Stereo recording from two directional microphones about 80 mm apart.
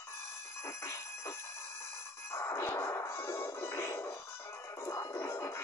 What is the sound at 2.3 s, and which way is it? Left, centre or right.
Music, left.